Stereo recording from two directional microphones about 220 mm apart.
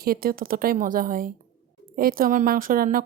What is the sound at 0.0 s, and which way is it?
Speech, 45° right (ahead or behind).